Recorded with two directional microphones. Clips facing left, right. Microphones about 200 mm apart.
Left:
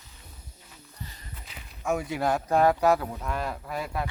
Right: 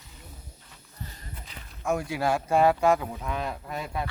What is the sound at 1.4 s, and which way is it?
Speech, 5° left (ahead or behind).